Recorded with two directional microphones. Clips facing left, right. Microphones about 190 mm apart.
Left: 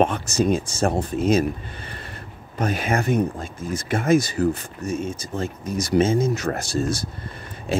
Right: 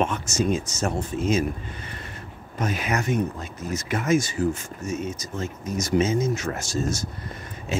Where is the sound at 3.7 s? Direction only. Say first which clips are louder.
Left 3 dB; 30° left (ahead or behind).